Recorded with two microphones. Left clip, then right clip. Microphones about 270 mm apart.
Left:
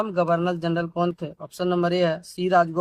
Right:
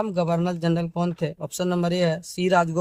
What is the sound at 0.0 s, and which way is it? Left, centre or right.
Speech, right.